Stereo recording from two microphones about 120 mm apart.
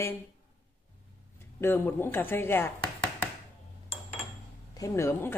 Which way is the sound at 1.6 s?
20° left (ahead or behind).